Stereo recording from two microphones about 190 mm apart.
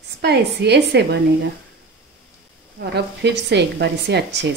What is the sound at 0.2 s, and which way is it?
A woman's voice, 60° right (ahead or behind).